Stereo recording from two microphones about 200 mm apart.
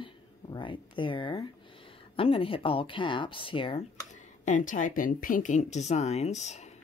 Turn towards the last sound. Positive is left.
turn(degrees=35)  # may be behind; listen again after turning